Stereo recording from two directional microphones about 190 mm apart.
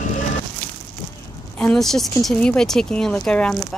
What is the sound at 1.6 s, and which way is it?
Speech, 5° left (ahead or behind).